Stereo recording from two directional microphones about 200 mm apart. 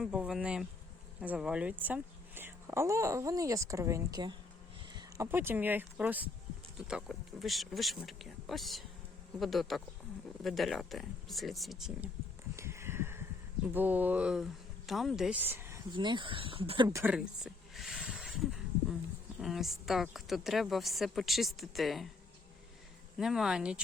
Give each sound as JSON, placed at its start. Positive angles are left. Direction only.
{"t": 0.0, "sound": "a woman's voice", "side_deg": -5}
{"t": 12.5, "sound": "a sound", "side_deg": -15}
{"t": 13.7, "sound": "speech", "side_deg": -10}
{"t": 15.9, "sound": "speech", "side_deg": -25}
{"t": 17.0, "sound": "a sound", "side_deg": -5}
{"t": 19.4, "sound": "a woman's voice", "side_deg": 0}
{"t": 23.1, "sound": "a woman's voice", "side_deg": 0}